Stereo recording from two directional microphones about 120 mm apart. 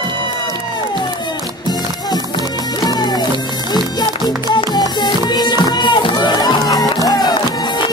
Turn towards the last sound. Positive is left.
turn(degrees=35)  # may be behind; listen again after turning